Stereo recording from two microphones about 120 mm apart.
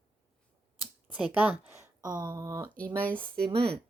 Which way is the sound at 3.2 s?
50° right (ahead or behind).